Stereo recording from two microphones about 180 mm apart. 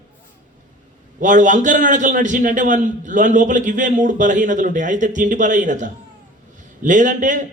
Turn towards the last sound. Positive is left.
turn(degrees=-45)  # may be behind; listen again after turning